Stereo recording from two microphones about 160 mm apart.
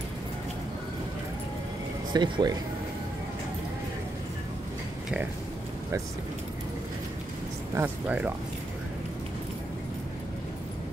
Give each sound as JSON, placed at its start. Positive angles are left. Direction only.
{"t": 2.1, "sound": "speech", "side_deg": -30}
{"t": 7.7, "sound": "speech", "side_deg": -10}